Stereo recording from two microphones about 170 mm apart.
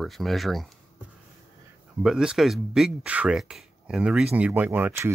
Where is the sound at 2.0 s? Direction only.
5° right (ahead or behind).